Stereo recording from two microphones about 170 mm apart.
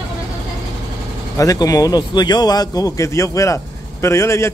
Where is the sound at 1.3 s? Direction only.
20° left (ahead or behind).